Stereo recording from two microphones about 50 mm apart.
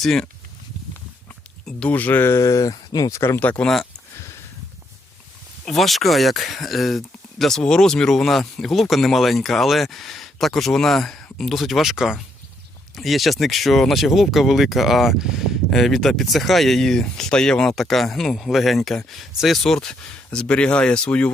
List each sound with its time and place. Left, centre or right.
0.0 s speech: centre
1.9 s speech: left
2.2 s a sound: left
3.1 s speech: left
4.2 s a sound: left
5.6 s speech: centre
7.6 s speech: centre
15.7 s speech: centre
19.6 s speech: centre